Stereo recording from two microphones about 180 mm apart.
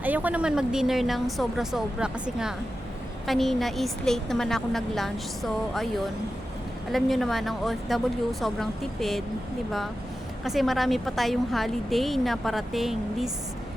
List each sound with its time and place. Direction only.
0.0 s a woman's voice: 10° right (ahead or behind)
6.9 s a woman's voice: centre (ahead or behind)
10.4 s a woman's voice: centre (ahead or behind)